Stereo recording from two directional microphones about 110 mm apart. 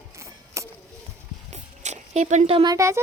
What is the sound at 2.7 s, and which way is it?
Speech, 25° right (ahead or behind).